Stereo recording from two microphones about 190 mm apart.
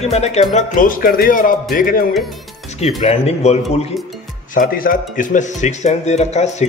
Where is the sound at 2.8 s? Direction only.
35° left (ahead or behind).